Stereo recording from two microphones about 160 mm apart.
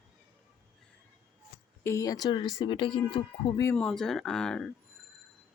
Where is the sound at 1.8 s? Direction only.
20° left (ahead or behind).